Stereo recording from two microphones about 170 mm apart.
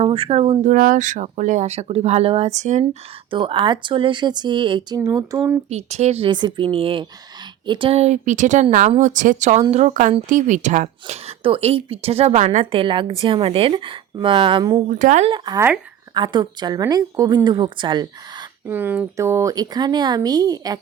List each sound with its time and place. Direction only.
0.0 s speech: 35° right (ahead or behind)
0.6 s speech: 50° right (ahead or behind)
3.2 s speech: 30° right (ahead or behind)
5.6 s a woman's voice: 40° right (ahead or behind)
14.8 s speech: 50° right (ahead or behind)
15.3 s speech: 25° right (ahead or behind)
18.7 s speech: 10° right (ahead or behind)